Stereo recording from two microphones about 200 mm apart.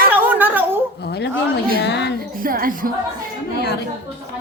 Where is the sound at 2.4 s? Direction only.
45° right (ahead or behind).